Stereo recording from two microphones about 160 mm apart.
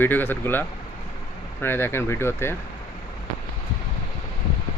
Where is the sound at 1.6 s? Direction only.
15° left (ahead or behind).